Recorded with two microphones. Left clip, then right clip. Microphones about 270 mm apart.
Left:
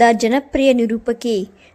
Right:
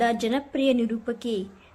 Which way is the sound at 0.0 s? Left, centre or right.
Left.